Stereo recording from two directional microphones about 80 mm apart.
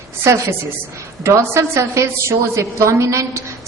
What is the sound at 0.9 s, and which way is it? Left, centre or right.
A woman's voice, right.